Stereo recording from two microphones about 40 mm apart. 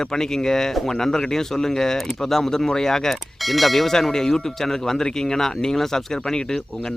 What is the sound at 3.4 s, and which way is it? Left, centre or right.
Speech, centre.